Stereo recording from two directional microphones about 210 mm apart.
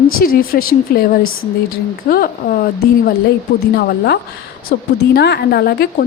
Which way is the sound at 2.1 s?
45° left (ahead or behind).